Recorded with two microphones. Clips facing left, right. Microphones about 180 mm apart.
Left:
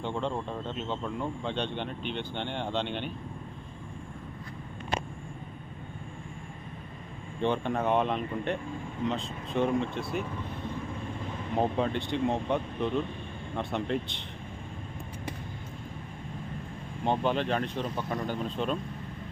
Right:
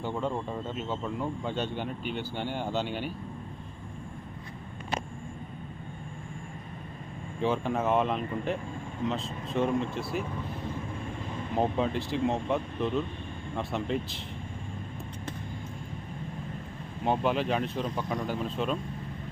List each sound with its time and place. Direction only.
0.0 s speech: 5° right (ahead or behind)
7.4 s speech: 5° right (ahead or behind)
11.5 s speech: centre (ahead or behind)
17.1 s speech: 5° right (ahead or behind)